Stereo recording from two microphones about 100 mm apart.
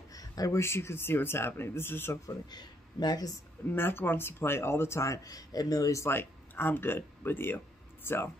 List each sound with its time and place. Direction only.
0.1 s speech: 35° left (ahead or behind); by 2.1 s 20° left (ahead or behind)
2.2 s speech: 45° left (ahead or behind)
3.6 s speech: 20° left (ahead or behind)